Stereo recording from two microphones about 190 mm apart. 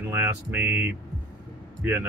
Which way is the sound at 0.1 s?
10° right (ahead or behind).